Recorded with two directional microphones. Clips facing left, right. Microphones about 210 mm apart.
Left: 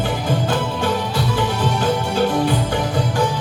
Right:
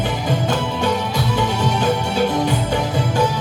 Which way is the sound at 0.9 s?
10° right (ahead or behind).